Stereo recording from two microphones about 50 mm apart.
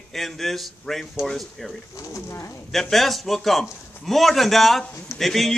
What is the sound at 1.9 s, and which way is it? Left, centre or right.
Speech, left.